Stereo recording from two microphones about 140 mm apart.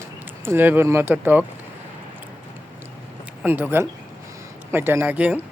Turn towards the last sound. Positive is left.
turn(degrees=-10)  # may be behind; listen again after turning